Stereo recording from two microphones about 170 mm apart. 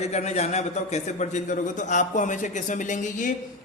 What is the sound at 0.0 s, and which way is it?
A man's voice, 40° left (ahead or behind).